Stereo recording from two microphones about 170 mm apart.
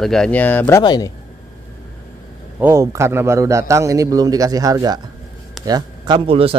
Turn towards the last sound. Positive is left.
turn(degrees=-35)  # may be behind; listen again after turning